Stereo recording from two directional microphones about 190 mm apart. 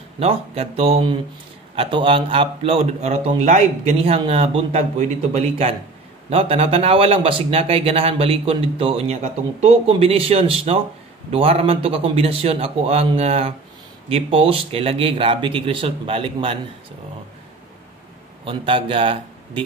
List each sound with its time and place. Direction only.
0.2 s speech: 30° right (ahead or behind)
18.4 s speech: 25° right (ahead or behind)